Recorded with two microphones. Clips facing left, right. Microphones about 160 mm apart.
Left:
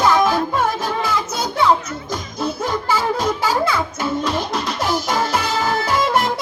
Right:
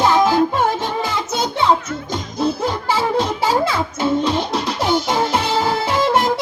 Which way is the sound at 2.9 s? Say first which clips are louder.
Right 1 dB; 30° right (ahead or behind).